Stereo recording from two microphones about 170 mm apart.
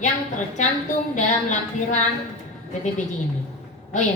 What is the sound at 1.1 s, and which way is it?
Speech, 45° left (ahead or behind).